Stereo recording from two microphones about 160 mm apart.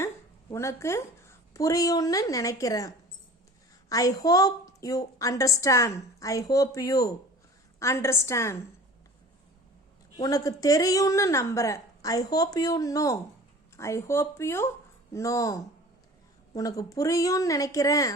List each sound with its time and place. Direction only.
0.5 s a woman's voice: 15° left (ahead or behind)
10.2 s a woman's voice: 20° left (ahead or behind)